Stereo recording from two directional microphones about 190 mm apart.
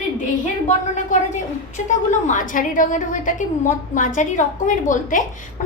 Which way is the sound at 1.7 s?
40° left (ahead or behind).